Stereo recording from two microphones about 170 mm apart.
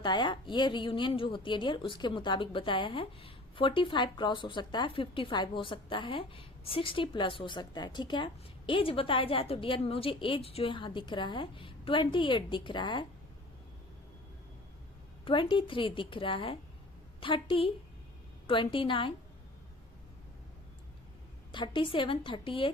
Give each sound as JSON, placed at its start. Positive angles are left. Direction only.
{"t": 0.0, "sound": "a woman's voice", "side_deg": 25}
{"t": 15.2, "sound": "a woman's voice", "side_deg": 30}
{"t": 21.5, "sound": "a woman's voice", "side_deg": 30}